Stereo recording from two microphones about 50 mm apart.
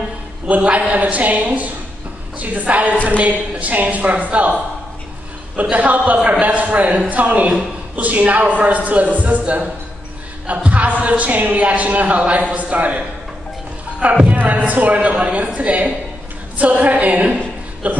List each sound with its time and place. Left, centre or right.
0.5 s a man's voice: right
5.6 s a man's voice: right